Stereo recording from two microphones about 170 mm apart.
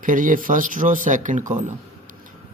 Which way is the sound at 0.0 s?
50° right (ahead or behind).